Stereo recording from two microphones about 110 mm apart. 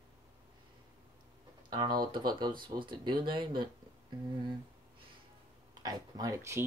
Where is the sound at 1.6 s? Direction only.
45° right (ahead or behind).